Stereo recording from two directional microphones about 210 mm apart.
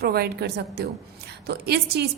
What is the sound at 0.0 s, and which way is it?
A woman's voice, 50° right (ahead or behind).